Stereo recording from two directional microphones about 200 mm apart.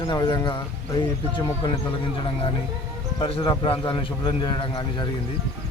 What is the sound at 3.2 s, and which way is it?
A man's voice, 25° left (ahead or behind).